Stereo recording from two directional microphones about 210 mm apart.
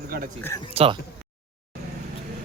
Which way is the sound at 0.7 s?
25° right (ahead or behind).